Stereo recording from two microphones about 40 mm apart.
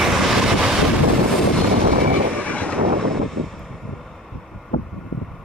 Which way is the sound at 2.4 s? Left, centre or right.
Left.